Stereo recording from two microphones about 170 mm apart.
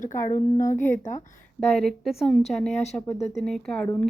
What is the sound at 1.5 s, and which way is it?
Speech, centre (ahead or behind).